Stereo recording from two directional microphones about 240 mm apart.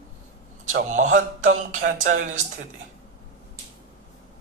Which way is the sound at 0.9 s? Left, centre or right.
Right.